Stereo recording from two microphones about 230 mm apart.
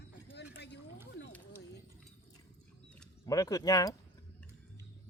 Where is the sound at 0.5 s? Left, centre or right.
Left.